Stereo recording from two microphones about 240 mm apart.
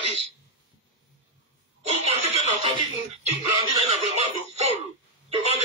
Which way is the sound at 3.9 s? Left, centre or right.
Right.